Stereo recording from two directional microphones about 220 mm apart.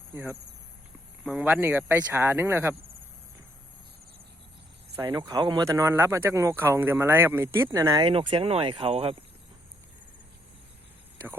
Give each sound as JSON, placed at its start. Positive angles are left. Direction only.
{"t": 0.1, "sound": "speech", "side_deg": -10}
{"t": 4.9, "sound": "speech", "side_deg": -20}